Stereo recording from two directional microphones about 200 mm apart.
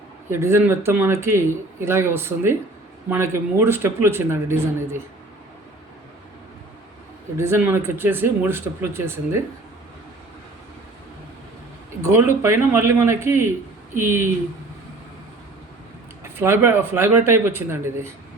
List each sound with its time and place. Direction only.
0.3 s speech: 15° right (ahead or behind)
7.3 s speech: 15° right (ahead or behind)
12.0 s speech: 15° right (ahead or behind)
16.2 s speech: 10° right (ahead or behind)